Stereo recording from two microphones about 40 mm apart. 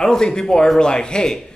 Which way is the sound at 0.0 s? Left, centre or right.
Centre.